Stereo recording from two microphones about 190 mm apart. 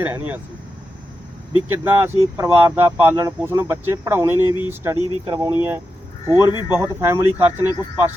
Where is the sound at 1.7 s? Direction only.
10° right (ahead or behind).